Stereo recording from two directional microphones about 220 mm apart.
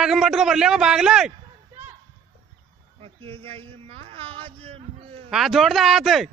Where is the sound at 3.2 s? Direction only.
25° right (ahead or behind).